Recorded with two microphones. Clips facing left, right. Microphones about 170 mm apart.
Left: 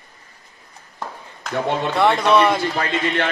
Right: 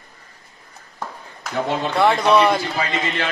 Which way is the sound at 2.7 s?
60° left (ahead or behind).